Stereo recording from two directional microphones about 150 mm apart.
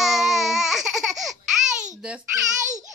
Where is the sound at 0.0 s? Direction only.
Centre (ahead or behind).